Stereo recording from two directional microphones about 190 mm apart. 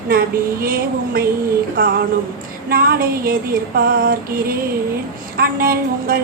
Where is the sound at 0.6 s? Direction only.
50° right (ahead or behind).